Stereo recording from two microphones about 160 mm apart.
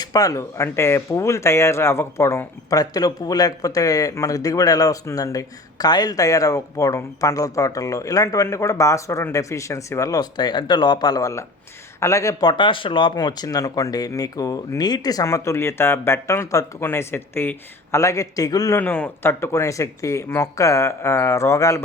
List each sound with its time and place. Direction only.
0.0 s speech: 25° left (ahead or behind)
18.8 s speech: 10° left (ahead or behind)